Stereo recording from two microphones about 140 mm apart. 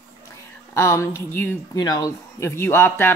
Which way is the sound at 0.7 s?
20° left (ahead or behind).